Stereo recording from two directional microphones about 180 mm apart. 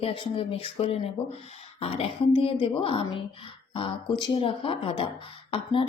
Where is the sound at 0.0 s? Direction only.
30° left (ahead or behind).